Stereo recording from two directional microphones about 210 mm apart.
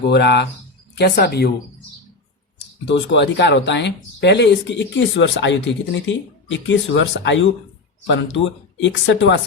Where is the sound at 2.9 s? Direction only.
55° left (ahead or behind).